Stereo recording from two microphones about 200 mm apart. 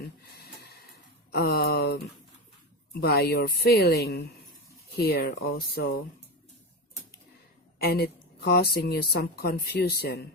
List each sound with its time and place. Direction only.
0.4 s snort: 50° left (ahead or behind)
1.3 s speech: 50° left (ahead or behind)
3.0 s speech: 50° left (ahead or behind)
7.8 s speech: 50° left (ahead or behind)